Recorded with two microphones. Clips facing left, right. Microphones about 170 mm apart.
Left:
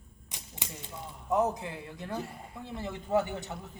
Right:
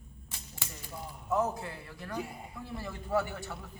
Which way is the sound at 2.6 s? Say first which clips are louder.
Left 3 dB; 20° left (ahead or behind).